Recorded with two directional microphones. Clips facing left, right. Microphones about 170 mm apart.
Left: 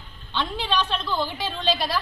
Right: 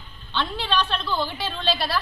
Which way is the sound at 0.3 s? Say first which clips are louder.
Even; 15° left (ahead or behind).